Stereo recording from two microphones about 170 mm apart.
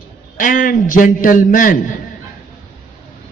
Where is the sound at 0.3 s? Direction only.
50° left (ahead or behind).